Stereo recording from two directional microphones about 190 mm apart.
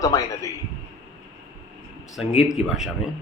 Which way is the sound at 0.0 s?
15° left (ahead or behind).